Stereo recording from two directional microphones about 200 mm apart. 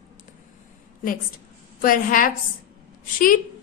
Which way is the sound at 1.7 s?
45° left (ahead or behind).